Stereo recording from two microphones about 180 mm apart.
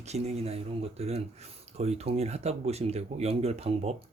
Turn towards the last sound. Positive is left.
turn(degrees=-35)  # may be behind; listen again after turning